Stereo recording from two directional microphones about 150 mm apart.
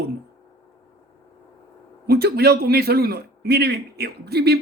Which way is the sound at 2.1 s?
90° right.